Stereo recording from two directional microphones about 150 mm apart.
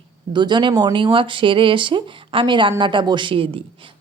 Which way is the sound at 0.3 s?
30° right (ahead or behind).